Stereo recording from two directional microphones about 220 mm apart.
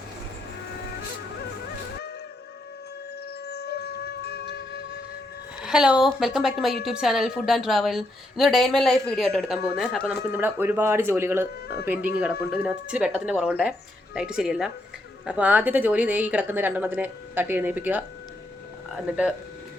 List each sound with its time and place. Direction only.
3.4 s wind instrument: 50° left (ahead or behind)
5.6 s a woman's voice: 5° right (ahead or behind)